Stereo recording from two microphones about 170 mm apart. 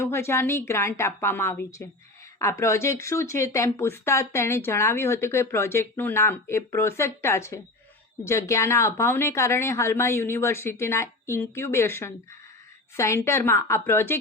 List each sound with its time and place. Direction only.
0.0 s speech: 15° left (ahead or behind)